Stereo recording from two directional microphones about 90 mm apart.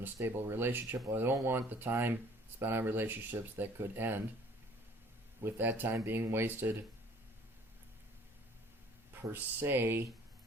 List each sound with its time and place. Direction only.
0.0 s speech: 25° right (ahead or behind)
5.4 s speech: 25° right (ahead or behind)
9.3 s speech: 25° right (ahead or behind)